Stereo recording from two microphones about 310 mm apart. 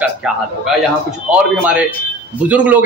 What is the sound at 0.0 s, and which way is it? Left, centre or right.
A man's voice, centre.